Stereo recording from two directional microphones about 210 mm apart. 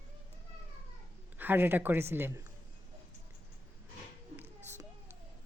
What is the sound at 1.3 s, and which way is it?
Speech, 10° right (ahead or behind).